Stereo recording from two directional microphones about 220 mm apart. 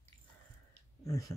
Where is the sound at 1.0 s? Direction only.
15° left (ahead or behind).